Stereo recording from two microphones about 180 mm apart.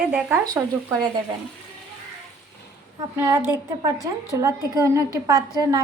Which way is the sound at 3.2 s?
10° right (ahead or behind).